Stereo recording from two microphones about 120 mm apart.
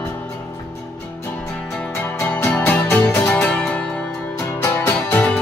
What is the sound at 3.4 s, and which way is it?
Music, 5° left (ahead or behind).